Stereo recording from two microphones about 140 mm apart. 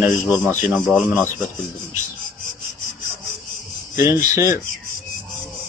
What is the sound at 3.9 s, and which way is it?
Speech, 20° right (ahead or behind).